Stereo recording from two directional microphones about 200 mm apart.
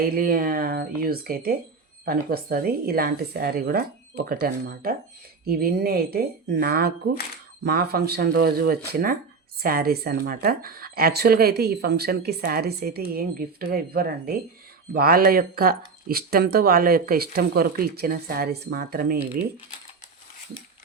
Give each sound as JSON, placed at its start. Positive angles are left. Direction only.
{"t": 0.0, "sound": "speech", "side_deg": -50}